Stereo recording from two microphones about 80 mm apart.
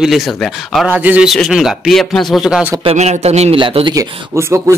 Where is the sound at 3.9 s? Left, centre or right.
Right.